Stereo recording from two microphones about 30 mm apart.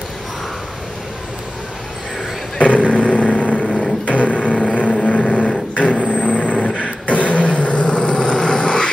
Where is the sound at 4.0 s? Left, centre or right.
Left.